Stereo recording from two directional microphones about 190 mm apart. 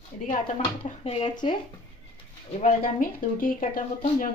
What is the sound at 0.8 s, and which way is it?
Speech, 30° left (ahead or behind).